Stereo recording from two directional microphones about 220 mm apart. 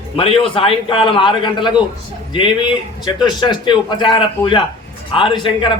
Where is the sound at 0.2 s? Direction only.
25° left (ahead or behind).